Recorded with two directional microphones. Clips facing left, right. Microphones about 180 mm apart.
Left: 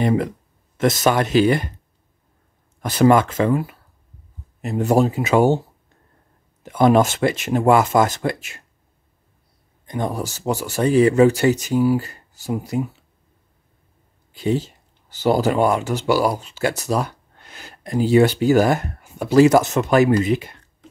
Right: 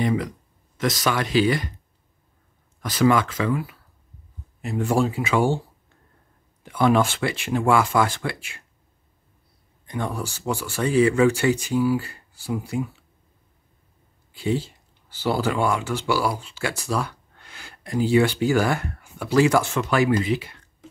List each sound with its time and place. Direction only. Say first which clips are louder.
0.0 s speech: left 4 dB; 45° left (ahead or behind)
2.8 s speech: left 5 dB; 50° left (ahead or behind)
6.6 s speech: left 4 dB; 45° left (ahead or behind)
9.8 s speech: left 4 dB; 40° left (ahead or behind)
14.4 s speech: left 3 dB; 45° left (ahead or behind)